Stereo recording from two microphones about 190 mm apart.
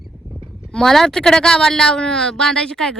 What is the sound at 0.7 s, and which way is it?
Speech, 5° left (ahead or behind).